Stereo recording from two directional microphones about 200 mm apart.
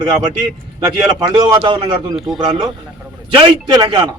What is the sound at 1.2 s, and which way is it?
A man's voice, 20° right (ahead or behind).